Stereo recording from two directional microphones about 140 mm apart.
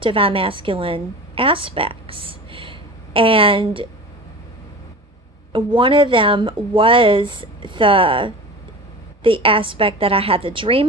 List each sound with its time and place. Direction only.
0.0 s a woman's voice: 40° right (ahead or behind)
5.7 s speech: 35° right (ahead or behind)